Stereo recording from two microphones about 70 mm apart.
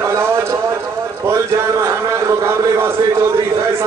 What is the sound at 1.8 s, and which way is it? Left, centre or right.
A man's voice, right.